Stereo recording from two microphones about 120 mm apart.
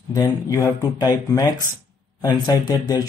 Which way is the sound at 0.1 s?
30° left (ahead or behind).